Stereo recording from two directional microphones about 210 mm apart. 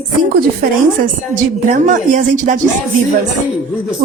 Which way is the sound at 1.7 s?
35° right (ahead or behind).